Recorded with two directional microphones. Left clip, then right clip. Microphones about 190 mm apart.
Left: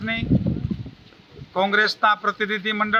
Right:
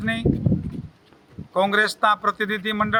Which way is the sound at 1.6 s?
35° right (ahead or behind).